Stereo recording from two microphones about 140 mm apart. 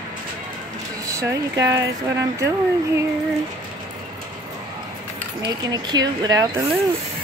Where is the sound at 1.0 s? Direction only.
20° right (ahead or behind).